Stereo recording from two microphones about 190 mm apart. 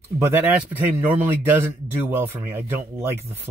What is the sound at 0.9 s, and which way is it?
A man's voice, 10° right (ahead or behind).